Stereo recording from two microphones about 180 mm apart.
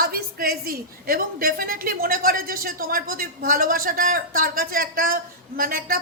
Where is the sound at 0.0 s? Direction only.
55° right (ahead or behind).